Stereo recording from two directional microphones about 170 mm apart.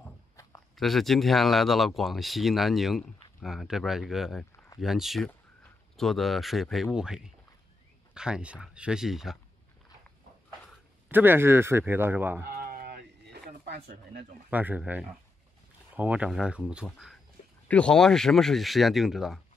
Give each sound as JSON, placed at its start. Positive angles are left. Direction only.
{"t": 0.7, "sound": "speech", "side_deg": 0}
{"t": 11.1, "sound": "a man's voice", "side_deg": -10}
{"t": 12.6, "sound": "a sound", "side_deg": -60}
{"t": 14.5, "sound": "a man's voice", "side_deg": -10}